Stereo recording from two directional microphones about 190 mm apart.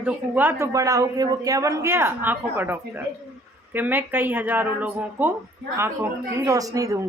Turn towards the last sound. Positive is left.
turn(degrees=-15)  # may be behind; listen again after turning